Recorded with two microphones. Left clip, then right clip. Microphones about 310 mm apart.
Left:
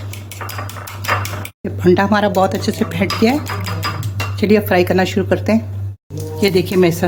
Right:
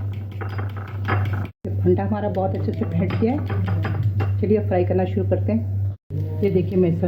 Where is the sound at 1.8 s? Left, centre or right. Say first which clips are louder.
Left 9 dB; left.